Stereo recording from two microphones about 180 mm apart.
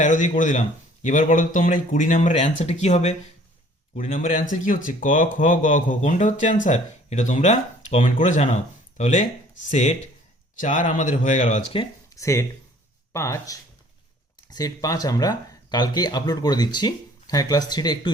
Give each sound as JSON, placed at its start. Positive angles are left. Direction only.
{"t": 0.0, "sound": "speech", "side_deg": 45}
{"t": 12.1, "sound": "speech", "side_deg": 15}